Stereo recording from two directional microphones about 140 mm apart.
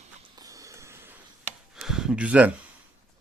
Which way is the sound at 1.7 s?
5° right (ahead or behind).